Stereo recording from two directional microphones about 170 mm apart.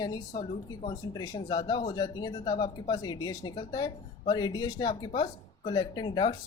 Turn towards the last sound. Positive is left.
turn(degrees=25)  # may be behind; listen again after turning